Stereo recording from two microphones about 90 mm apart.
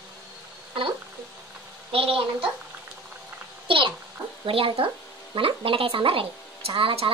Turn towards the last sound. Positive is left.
turn(degrees=-85)